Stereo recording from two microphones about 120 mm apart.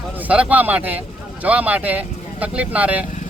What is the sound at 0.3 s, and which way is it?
Speech, 10° right (ahead or behind).